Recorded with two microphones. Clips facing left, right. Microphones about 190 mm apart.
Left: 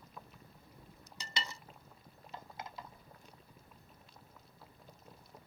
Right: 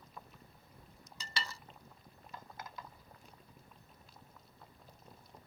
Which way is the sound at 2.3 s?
25° left (ahead or behind).